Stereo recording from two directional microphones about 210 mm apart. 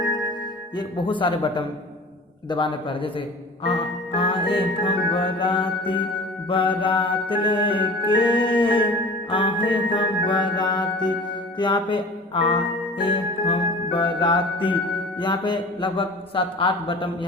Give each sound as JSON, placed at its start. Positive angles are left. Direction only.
{"t": 0.8, "sound": "music", "side_deg": 25}